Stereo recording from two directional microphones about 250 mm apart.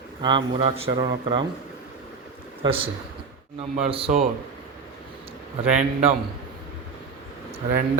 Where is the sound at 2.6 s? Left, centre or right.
Right.